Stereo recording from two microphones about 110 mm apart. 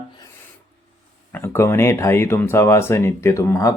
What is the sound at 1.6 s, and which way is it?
Speech, 25° left (ahead or behind).